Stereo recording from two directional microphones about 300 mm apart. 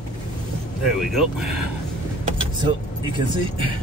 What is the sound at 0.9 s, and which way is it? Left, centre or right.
Speech, centre.